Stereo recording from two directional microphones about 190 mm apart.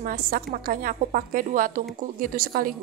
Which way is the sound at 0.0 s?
50° right (ahead or behind).